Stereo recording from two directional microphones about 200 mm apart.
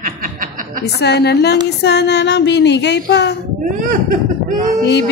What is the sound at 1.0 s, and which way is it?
Music, 55° left (ahead or behind).